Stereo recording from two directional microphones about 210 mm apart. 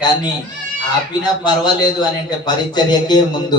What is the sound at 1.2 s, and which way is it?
A man's voice, 20° left (ahead or behind).